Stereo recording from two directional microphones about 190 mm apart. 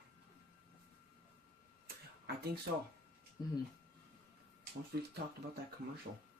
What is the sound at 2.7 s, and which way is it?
Speech, 55° right (ahead or behind).